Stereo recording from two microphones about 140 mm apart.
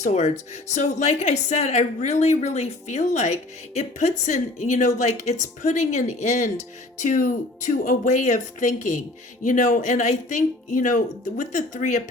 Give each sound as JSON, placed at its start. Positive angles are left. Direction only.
{"t": 0.0, "sound": "a woman's voice", "side_deg": 55}
{"t": 7.0, "sound": "a woman's voice", "side_deg": 65}